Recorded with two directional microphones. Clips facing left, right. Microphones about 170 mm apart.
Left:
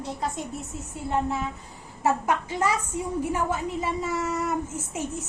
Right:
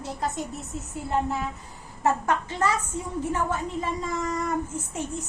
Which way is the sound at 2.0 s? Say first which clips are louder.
Even; 10° left (ahead or behind).